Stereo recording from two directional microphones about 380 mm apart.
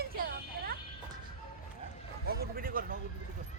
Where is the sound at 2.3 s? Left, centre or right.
Right.